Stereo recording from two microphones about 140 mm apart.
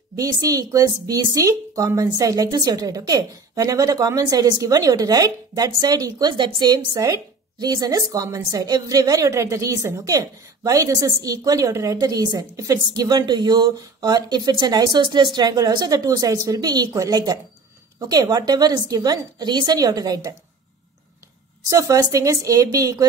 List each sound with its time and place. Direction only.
0.1 s a woman's voice: 25° right (ahead or behind)
21.6 s a woman's voice: 25° right (ahead or behind)